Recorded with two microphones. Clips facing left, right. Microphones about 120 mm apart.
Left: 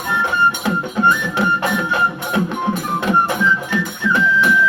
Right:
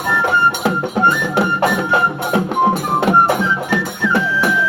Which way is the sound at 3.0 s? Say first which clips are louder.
Right 3 dB; 60° right (ahead or behind).